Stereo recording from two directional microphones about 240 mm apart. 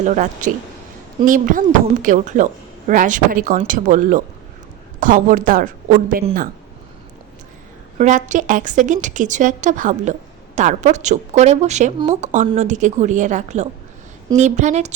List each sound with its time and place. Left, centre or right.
0.0 s a woman's voice: right
7.9 s a woman's voice: right